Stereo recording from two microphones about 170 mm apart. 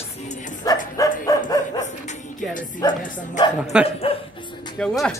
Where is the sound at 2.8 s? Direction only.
20° left (ahead or behind).